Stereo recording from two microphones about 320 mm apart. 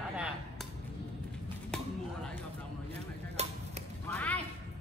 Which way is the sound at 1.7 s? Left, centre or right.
Centre.